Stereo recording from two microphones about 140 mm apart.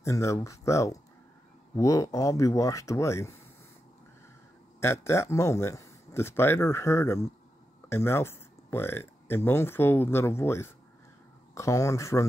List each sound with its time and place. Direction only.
0.0 s speech: 20° left (ahead or behind)
4.7 s speech: 20° left (ahead or behind)